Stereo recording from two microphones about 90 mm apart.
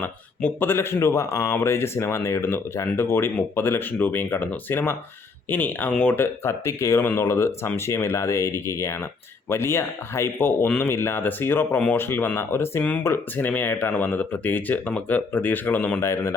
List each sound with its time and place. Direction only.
0.0 s speech: 20° left (ahead or behind)
6.1 s speech: 30° left (ahead or behind)
16.0 s speech: 30° left (ahead or behind)